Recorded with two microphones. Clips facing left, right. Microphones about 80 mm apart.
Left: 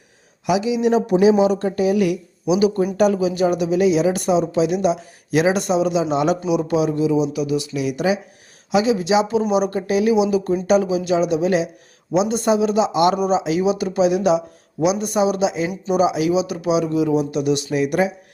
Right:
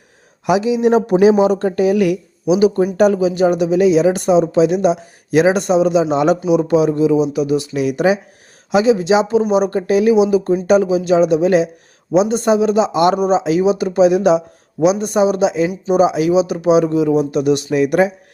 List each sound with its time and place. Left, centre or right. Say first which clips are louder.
0.4 s speech: right 4 dB; right
2.5 s speech: right 4 dB; right
6.1 s speech: right 5 dB; right
8.7 s speech: right 4 dB; right